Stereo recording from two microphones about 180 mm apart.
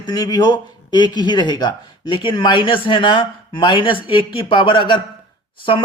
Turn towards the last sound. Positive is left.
turn(degrees=30)  # may be behind; listen again after turning